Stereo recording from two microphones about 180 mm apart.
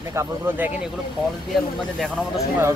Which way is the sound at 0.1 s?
15° right (ahead or behind).